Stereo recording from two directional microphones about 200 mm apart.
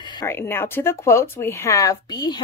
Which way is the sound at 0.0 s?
20° left (ahead or behind).